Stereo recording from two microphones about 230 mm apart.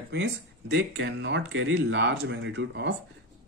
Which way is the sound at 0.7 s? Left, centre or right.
Right.